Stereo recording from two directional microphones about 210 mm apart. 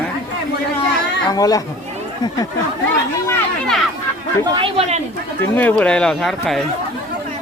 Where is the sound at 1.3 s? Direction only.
15° left (ahead or behind).